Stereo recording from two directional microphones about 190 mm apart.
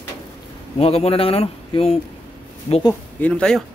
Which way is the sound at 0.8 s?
30° left (ahead or behind).